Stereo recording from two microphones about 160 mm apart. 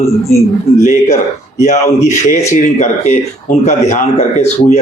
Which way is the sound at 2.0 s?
45° left (ahead or behind).